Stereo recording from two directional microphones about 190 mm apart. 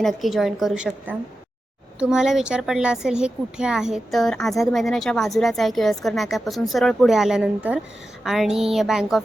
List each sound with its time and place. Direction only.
0.0 s speech: centre (ahead or behind)